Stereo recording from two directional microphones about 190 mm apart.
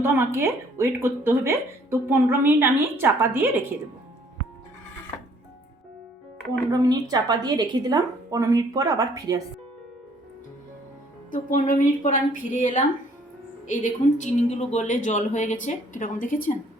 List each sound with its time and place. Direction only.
0.0 s speech: 15° right (ahead or behind)
6.7 s a woman's voice: 20° right (ahead or behind)
11.3 s a woman's voice: 45° left (ahead or behind)